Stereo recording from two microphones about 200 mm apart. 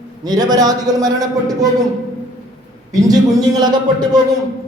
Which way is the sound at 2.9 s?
15° right (ahead or behind).